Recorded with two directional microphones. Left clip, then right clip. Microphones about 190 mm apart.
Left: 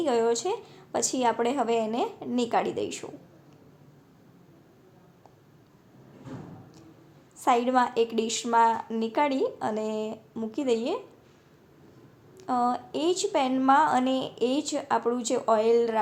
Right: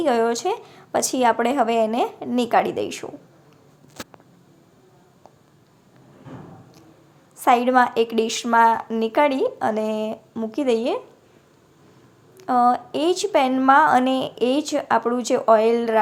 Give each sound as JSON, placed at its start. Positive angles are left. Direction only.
{"t": 0.0, "sound": "a woman's voice", "side_deg": -30}
{"t": 7.3, "sound": "a woman's voice", "side_deg": -30}
{"t": 12.4, "sound": "a woman's voice", "side_deg": -30}